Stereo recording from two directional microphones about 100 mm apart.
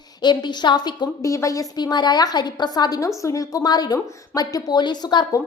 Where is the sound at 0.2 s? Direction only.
50° left (ahead or behind).